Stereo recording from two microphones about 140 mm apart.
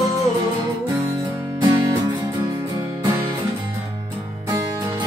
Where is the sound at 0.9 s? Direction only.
20° right (ahead or behind).